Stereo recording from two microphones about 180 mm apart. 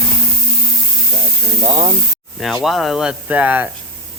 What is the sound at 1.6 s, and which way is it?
Speech, 35° right (ahead or behind).